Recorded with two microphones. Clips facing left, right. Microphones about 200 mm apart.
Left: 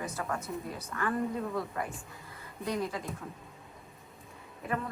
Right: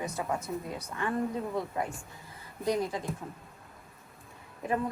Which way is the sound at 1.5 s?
20° right (ahead or behind).